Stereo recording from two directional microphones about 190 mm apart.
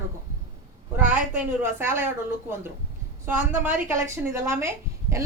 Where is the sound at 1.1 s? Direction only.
10° right (ahead or behind).